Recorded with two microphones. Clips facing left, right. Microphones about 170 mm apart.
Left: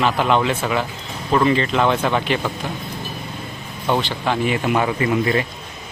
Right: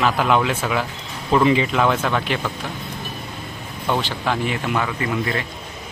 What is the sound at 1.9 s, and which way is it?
Speech, 10° left (ahead or behind).